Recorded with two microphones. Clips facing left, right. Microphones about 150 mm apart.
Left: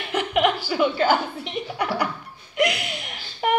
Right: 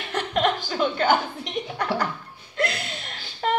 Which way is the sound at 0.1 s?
10° left (ahead or behind).